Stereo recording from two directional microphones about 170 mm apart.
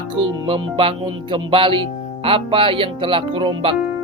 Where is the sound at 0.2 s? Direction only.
30° right (ahead or behind).